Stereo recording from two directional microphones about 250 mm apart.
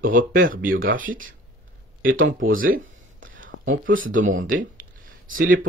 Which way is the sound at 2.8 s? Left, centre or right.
Right.